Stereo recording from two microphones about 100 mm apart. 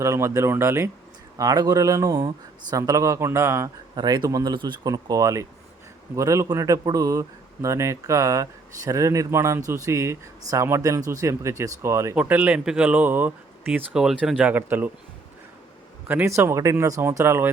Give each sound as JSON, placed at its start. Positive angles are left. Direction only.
{"t": 0.0, "sound": "speech", "side_deg": -30}
{"t": 1.4, "sound": "a man's voice", "side_deg": -40}
{"t": 3.9, "sound": "speech", "side_deg": -45}
{"t": 4.5, "sound": "a man's voice", "side_deg": -50}
{"t": 12.2, "sound": "speech", "side_deg": -15}
{"t": 14.0, "sound": "speech", "side_deg": -5}
{"t": 14.3, "sound": "speech", "side_deg": -15}
{"t": 16.2, "sound": "speech", "side_deg": -25}